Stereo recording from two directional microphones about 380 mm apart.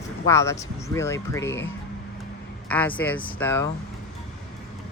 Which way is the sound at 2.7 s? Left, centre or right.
Centre.